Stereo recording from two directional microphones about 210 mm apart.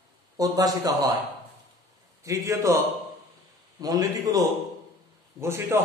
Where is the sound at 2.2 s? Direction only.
15° right (ahead or behind).